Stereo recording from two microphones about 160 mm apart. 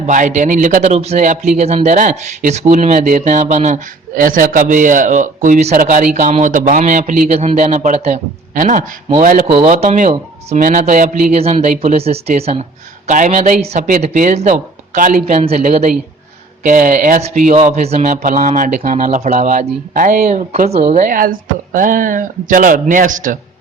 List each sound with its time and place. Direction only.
0.0 s a man's voice: 50° right (ahead or behind)
17.6 s a man's voice: 45° right (ahead or behind)